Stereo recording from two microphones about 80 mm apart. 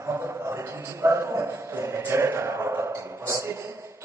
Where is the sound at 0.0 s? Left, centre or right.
Right.